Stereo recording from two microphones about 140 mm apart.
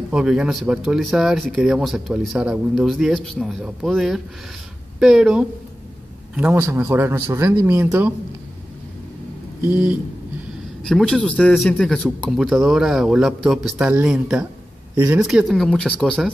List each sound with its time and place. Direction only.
0.1 s a man's voice: 5° right (ahead or behind)
10.8 s a man's voice: 5° left (ahead or behind); by 15.2 s 10° right (ahead or behind)
15.2 s speech: centre (ahead or behind)